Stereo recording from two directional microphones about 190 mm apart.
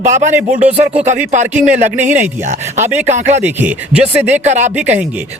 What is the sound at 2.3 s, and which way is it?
Speech, 40° right (ahead or behind).